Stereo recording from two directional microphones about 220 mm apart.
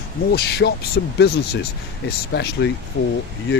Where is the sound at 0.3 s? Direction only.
50° left (ahead or behind).